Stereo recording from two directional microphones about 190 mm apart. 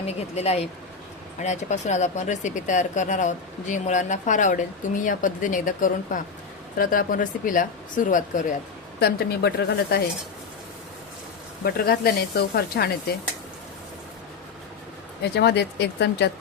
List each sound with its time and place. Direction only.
0.0 s speech: 35° left (ahead or behind)
9.0 s speech: 55° left (ahead or behind)
11.6 s speech: 55° left (ahead or behind)
15.2 s speech: 60° left (ahead or behind)